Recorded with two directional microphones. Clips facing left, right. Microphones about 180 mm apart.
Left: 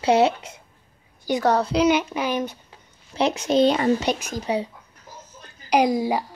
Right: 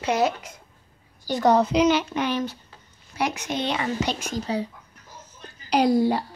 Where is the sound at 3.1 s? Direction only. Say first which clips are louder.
Left 7 dB; 30° left (ahead or behind).